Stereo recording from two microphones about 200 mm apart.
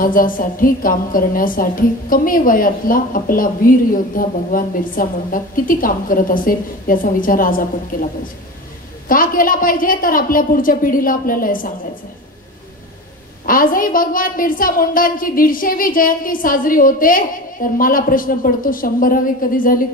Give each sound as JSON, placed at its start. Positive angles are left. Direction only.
{"t": 0.0, "sound": "a woman's voice", "side_deg": 45}
{"t": 9.1, "sound": "a woman's voice", "side_deg": 45}
{"t": 13.5, "sound": "a woman's voice", "side_deg": 45}